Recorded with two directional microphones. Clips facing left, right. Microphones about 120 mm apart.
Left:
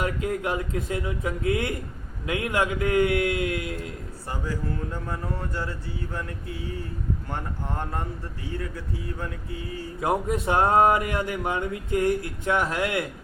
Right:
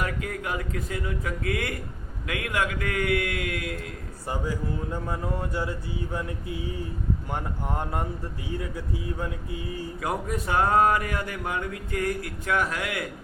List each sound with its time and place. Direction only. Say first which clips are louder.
0.0 s speech: left 4 dB; 25° left (ahead or behind)
4.3 s speech: right 1 dB; 15° right (ahead or behind)
10.0 s speech: left 6 dB; 25° left (ahead or behind)